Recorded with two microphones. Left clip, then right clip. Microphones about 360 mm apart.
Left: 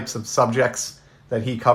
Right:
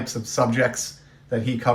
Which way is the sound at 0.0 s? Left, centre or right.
Centre.